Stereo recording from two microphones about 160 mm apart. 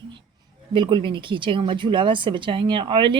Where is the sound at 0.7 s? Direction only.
30° right (ahead or behind).